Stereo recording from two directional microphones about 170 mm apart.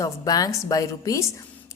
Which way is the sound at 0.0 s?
20° left (ahead or behind).